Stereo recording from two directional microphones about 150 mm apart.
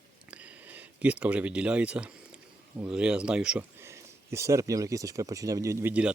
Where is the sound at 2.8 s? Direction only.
5° right (ahead or behind).